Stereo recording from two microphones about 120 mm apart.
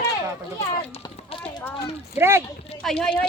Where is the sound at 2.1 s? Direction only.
20° right (ahead or behind).